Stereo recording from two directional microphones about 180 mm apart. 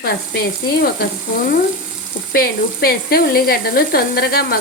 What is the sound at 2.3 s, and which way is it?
Speech, 55° left (ahead or behind).